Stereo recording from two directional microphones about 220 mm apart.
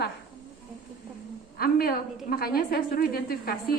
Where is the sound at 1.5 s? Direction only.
45° left (ahead or behind).